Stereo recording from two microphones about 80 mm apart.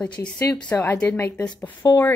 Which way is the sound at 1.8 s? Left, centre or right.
Left.